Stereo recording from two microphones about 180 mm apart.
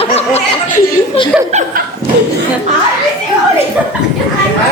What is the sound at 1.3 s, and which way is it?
Speech, 5° right (ahead or behind).